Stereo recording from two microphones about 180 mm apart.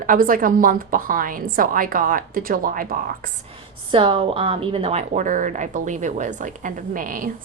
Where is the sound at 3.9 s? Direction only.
30° right (ahead or behind).